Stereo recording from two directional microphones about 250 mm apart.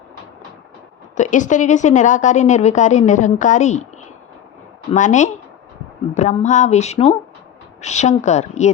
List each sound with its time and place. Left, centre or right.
1.1 s a woman's voice: left
4.9 s a woman's voice: left